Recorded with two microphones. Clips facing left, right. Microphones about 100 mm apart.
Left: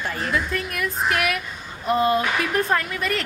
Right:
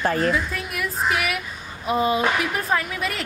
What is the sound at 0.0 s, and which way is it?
Speech, 45° right (ahead or behind).